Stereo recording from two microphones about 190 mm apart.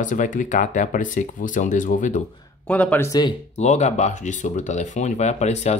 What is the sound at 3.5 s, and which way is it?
Speech, 35° left (ahead or behind).